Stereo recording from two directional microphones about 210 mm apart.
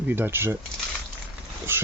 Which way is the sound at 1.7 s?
10° right (ahead or behind).